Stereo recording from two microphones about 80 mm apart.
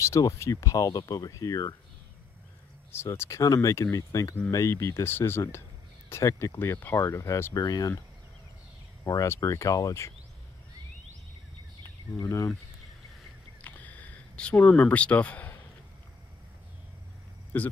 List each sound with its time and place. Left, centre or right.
0.0 s speech: left
2.9 s speech: left
7.0 s speech: left
7.5 s speech: left
9.0 s speech: left
13.6 s a sound: left
17.5 s speech: left